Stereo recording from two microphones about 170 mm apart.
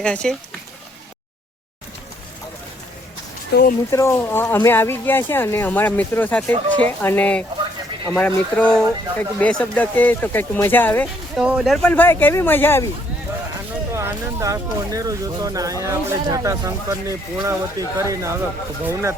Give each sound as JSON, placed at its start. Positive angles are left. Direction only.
{"t": 0.0, "sound": "speech", "side_deg": 5}
{"t": 3.5, "sound": "speech", "side_deg": 60}
{"t": 3.9, "sound": "speech", "side_deg": 15}
{"t": 11.3, "sound": "speech", "side_deg": -5}
{"t": 13.9, "sound": "speech", "side_deg": -15}